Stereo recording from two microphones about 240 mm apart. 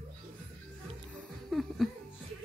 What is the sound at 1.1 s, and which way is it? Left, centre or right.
Music, centre.